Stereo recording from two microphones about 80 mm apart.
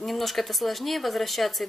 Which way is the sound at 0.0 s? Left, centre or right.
Centre.